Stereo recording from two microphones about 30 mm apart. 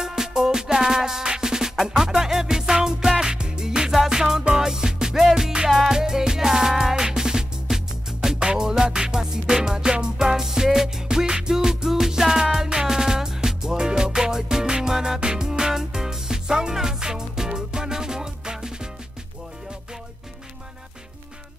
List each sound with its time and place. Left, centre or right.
0.0 s music: centre
5.7 s music: centre
5.9 s music: right
11.2 s music: right
11.5 s music: centre
15.1 s music: right